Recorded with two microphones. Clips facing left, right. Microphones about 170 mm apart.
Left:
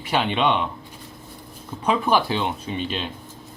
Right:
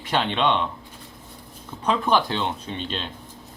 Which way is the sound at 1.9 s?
10° left (ahead or behind).